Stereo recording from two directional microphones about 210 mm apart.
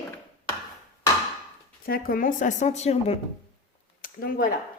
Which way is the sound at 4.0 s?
40° left (ahead or behind).